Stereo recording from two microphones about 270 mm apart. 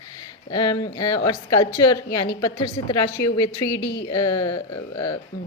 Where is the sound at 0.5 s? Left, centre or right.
Centre.